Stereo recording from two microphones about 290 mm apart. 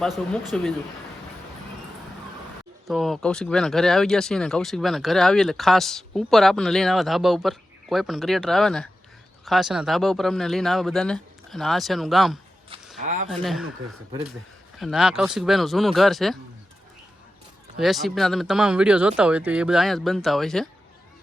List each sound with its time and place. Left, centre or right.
0.0 s speech: centre
2.8 s speech: centre
13.0 s speech: right
13.2 s speech: centre
14.8 s speech: centre
17.7 s speech: centre